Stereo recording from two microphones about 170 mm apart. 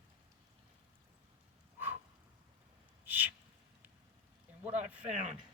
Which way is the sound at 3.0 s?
10° right (ahead or behind).